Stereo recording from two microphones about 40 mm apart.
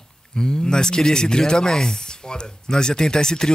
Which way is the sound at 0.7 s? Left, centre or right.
Centre.